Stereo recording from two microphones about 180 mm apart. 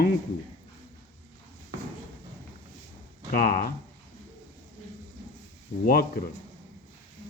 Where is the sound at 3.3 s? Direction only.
55° left (ahead or behind).